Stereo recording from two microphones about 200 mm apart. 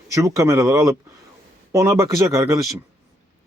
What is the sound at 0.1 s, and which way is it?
Speech, 15° right (ahead or behind).